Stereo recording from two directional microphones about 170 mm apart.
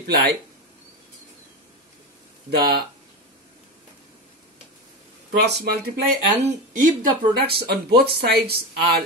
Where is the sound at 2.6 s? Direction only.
65° right (ahead or behind).